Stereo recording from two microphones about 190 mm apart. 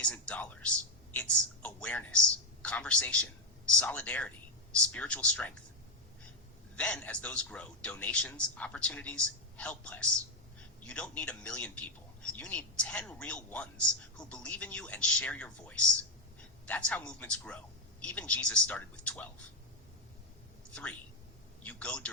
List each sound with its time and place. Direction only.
0.0 s a man's voice: 5° left (ahead or behind)
6.7 s a man's voice: 5° left (ahead or behind)
21.6 s a man's voice: 5° left (ahead or behind)